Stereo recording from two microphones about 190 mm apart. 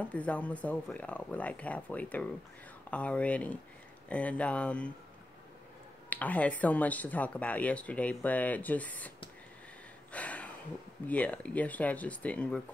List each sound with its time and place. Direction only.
0.0 s speech: 5° left (ahead or behind)
6.0 s speech: 10° left (ahead or behind)
10.1 s a sound: 5° left (ahead or behind)
11.1 s speech: 5° left (ahead or behind)